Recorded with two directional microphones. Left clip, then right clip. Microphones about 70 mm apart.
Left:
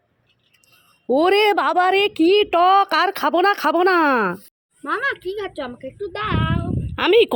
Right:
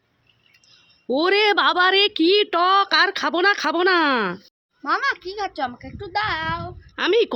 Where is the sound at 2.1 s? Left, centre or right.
Centre.